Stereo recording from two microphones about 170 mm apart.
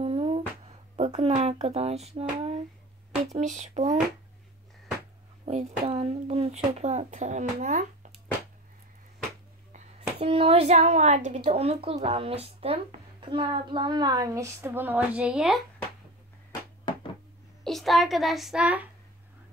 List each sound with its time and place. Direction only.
0.0 s humming: 35° right (ahead or behind)
0.9 s speech: 35° right (ahead or behind)
5.4 s speech: 40° right (ahead or behind)
10.2 s speech: 35° right (ahead or behind); by 15.6 s centre (ahead or behind)
17.6 s a child's voice: centre (ahead or behind)